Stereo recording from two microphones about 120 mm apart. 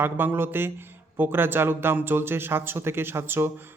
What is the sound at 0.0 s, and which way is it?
A man's voice, 20° right (ahead or behind).